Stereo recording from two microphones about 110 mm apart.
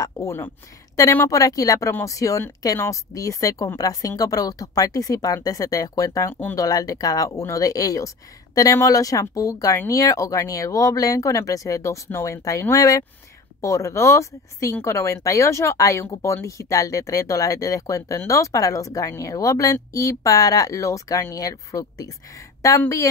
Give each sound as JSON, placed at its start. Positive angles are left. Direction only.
{"t": 0.0, "sound": "speech", "side_deg": 25}